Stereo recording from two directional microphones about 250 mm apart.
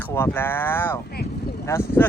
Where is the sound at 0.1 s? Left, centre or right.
Centre.